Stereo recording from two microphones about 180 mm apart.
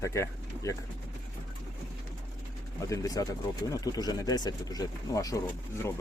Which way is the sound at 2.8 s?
20° left (ahead or behind).